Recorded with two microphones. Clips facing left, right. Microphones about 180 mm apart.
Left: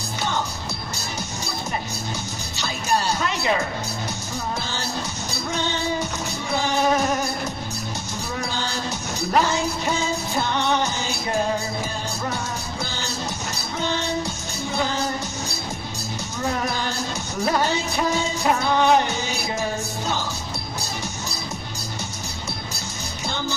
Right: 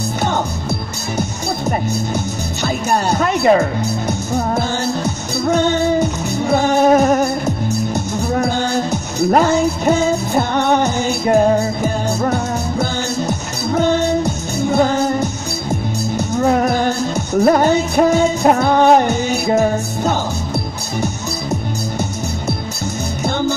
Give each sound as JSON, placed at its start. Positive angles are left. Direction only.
{"t": 1.7, "sound": "music", "side_deg": -55}
{"t": 8.3, "sound": "music", "side_deg": -55}